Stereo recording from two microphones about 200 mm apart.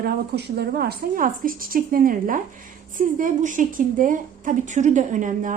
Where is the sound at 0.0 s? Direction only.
55° right (ahead or behind).